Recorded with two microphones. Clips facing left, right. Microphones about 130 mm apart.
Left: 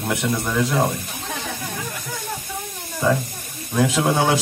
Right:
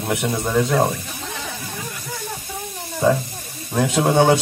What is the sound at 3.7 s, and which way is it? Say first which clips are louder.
Speech: right 1 dB; 30° right (ahead or behind).